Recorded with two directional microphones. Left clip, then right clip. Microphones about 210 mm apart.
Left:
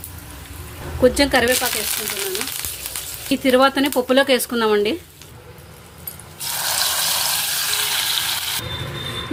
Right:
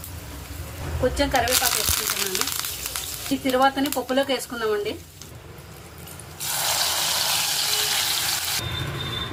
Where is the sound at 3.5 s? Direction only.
45° left (ahead or behind).